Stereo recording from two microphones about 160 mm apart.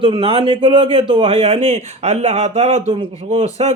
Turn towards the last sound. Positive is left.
turn(degrees=-45)  # may be behind; listen again after turning